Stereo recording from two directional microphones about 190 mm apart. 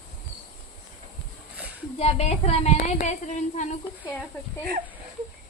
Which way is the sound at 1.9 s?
35° left (ahead or behind).